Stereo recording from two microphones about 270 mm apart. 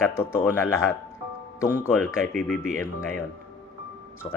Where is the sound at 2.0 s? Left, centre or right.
Centre.